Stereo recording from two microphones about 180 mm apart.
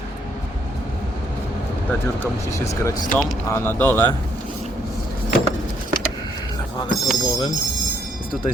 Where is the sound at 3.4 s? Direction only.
15° left (ahead or behind).